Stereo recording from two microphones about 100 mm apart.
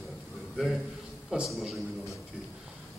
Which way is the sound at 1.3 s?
Centre (ahead or behind).